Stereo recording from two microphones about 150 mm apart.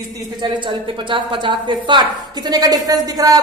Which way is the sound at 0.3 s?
30° right (ahead or behind).